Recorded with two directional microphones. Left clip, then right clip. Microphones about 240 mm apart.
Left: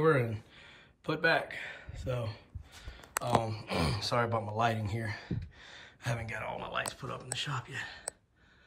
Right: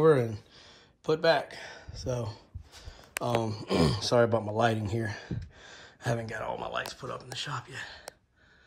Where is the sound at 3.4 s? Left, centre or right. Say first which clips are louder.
Right 6 dB; centre.